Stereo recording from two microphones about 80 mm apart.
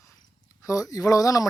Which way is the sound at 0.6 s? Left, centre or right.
Left.